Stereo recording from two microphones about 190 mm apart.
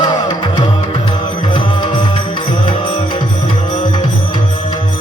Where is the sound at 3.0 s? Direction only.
30° left (ahead or behind).